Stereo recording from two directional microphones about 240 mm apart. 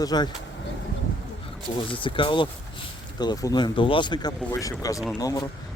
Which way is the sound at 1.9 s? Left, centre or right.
Left.